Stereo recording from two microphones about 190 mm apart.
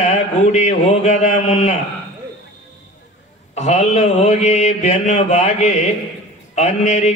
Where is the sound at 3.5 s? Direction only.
35° left (ahead or behind).